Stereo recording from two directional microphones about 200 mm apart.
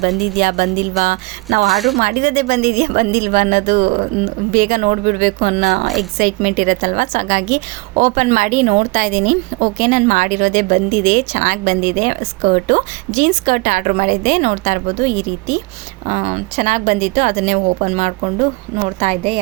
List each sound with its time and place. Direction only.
0.4 s a woman's voice: 45° right (ahead or behind)
1.7 s speech: centre (ahead or behind)
2.0 s a woman's voice: 40° right (ahead or behind)